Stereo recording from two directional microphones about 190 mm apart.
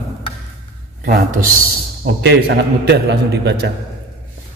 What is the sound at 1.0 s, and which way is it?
Speech, 50° right (ahead or behind).